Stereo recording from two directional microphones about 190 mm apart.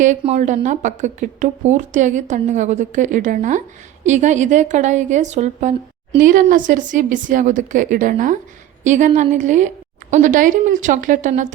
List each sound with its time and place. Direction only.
0.0 s a woman's voice: 40° right (ahead or behind)